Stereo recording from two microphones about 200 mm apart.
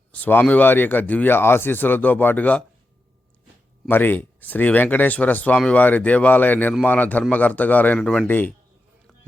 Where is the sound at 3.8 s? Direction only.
10° left (ahead or behind).